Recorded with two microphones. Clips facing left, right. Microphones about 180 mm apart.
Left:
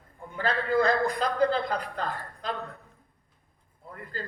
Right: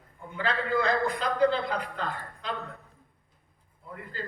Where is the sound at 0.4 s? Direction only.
40° left (ahead or behind).